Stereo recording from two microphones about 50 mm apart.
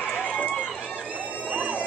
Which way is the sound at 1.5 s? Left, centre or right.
Right.